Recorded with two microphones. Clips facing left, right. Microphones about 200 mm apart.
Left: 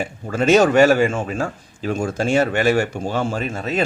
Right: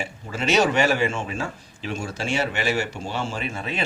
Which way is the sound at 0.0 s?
50° left (ahead or behind).